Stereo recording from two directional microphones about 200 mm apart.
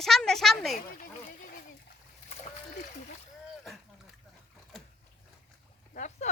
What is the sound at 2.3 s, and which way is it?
Splash, 40° left (ahead or behind).